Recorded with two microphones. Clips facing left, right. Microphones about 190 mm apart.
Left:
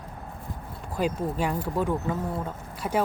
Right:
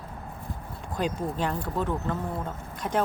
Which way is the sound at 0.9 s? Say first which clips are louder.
Left 2 dB; 10° left (ahead or behind).